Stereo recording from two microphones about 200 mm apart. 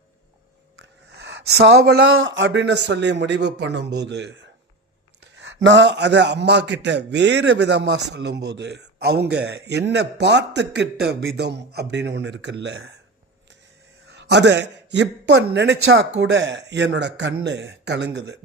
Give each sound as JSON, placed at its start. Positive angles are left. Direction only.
{"t": 0.8, "sound": "a sound", "side_deg": -60}
{"t": 2.1, "sound": "a man's voice", "side_deg": -75}
{"t": 14.1, "sound": "a man's voice", "side_deg": -60}